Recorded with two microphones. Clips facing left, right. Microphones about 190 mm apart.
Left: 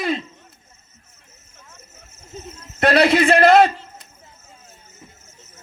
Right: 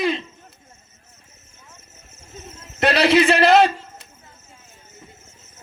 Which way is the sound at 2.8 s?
50° left (ahead or behind).